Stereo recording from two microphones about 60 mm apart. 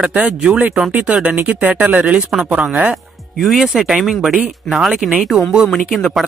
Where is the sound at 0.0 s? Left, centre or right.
Right.